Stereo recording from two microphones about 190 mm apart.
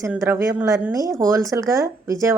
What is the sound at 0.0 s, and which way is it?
Speech, 15° right (ahead or behind).